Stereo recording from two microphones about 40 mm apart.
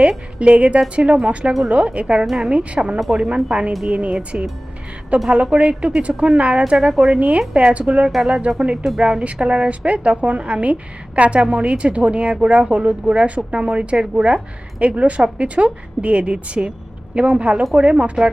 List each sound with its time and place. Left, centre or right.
0.3 s a woman's voice: right
7.2 s a woman's voice: right